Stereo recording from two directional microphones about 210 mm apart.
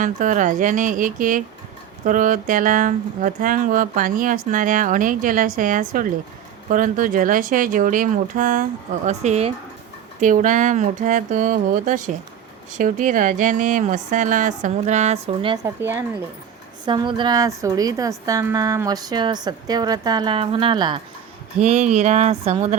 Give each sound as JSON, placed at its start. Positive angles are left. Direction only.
{"t": 0.0, "sound": "speech", "side_deg": -35}
{"t": 15.6, "sound": "a woman's voice", "side_deg": -10}
{"t": 16.8, "sound": "a woman's voice", "side_deg": -20}